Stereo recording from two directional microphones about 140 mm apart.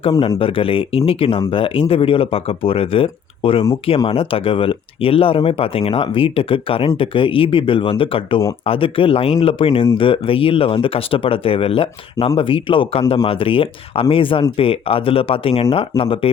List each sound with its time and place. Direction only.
0.3 s speech: 40° left (ahead or behind)